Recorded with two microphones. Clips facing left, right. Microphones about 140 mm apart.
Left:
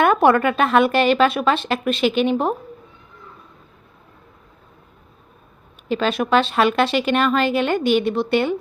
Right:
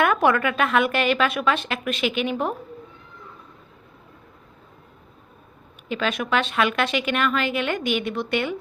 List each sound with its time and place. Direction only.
0.0 s a woman's voice: 30° left (ahead or behind)
5.9 s a woman's voice: 35° left (ahead or behind)